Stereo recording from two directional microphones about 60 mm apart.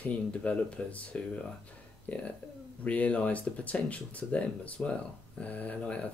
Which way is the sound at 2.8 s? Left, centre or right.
Left.